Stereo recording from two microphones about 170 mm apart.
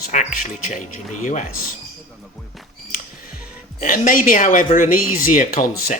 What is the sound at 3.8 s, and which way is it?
Speech, 50° left (ahead or behind).